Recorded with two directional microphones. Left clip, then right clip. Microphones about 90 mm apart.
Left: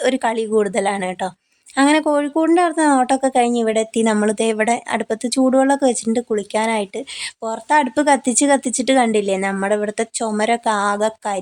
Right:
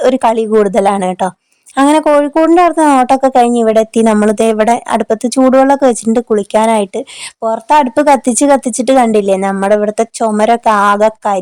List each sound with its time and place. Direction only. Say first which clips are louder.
0.0 s a woman's voice: right 8 dB; 65° right (ahead or behind)
1.7 s speech: right 7 dB; 55° right (ahead or behind)
2.6 s a woman's voice: right 7 dB; 65° right (ahead or behind)
7.4 s a woman's voice: right 8 dB; 60° right (ahead or behind)